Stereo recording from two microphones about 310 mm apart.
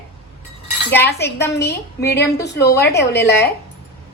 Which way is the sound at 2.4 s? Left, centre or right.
Left.